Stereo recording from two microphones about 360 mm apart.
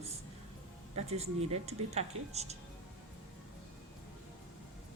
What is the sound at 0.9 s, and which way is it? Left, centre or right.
Speech, centre.